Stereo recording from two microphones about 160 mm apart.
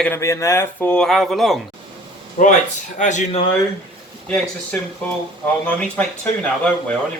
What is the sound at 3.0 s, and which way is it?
Speech, 50° left (ahead or behind).